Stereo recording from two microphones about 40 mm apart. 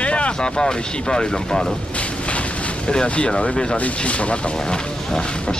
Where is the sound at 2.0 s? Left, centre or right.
Left.